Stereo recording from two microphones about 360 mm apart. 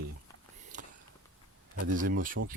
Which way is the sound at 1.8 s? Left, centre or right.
Right.